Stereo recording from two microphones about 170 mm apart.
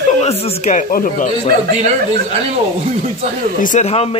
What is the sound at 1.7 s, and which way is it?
Speech, 40° right (ahead or behind).